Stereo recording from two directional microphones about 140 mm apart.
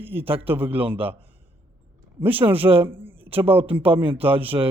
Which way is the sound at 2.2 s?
15° right (ahead or behind).